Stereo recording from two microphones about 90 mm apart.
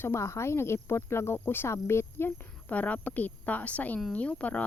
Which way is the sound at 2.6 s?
15° left (ahead or behind).